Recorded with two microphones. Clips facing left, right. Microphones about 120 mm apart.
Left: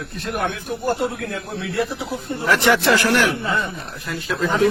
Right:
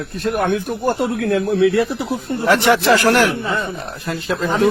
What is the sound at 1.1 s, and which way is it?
Speech, 65° right (ahead or behind).